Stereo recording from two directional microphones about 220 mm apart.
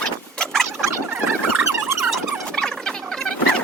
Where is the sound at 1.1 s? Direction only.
10° right (ahead or behind).